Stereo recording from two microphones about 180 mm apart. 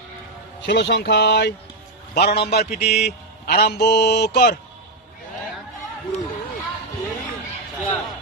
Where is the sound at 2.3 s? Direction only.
65° left (ahead or behind).